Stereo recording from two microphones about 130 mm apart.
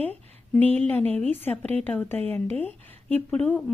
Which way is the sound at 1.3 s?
15° left (ahead or behind).